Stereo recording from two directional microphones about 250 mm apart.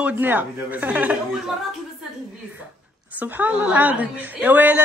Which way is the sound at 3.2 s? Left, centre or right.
Centre.